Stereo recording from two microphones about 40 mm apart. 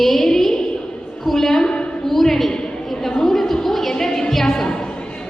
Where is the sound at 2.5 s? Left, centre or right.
Centre.